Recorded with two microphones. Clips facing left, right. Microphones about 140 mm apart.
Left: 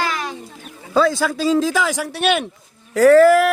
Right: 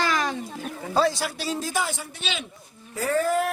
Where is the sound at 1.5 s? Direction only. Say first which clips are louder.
Left 10 dB; 90° left; by 2.4 s 65° left (ahead or behind).